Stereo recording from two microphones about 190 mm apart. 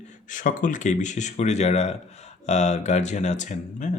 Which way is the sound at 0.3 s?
45° left (ahead or behind).